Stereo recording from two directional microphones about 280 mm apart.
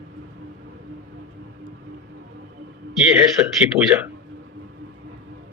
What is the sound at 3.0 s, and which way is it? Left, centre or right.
Speech, centre.